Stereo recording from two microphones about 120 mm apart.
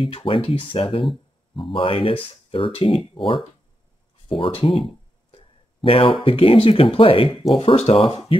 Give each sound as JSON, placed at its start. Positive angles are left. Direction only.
{"t": 0.0, "sound": "speech", "side_deg": 50}
{"t": 4.3, "sound": "speech", "side_deg": 50}
{"t": 4.6, "sound": "a sound", "side_deg": 45}
{"t": 6.2, "sound": "speech", "side_deg": 50}